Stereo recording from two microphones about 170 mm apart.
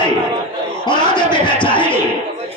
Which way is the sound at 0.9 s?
25° left (ahead or behind).